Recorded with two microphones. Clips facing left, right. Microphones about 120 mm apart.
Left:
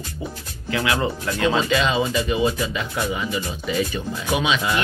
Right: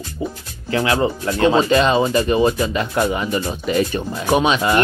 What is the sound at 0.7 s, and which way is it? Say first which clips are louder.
Speech: right 4 dB; 30° right (ahead or behind).